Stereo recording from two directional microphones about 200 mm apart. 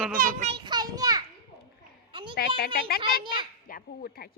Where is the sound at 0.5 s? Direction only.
20° right (ahead or behind).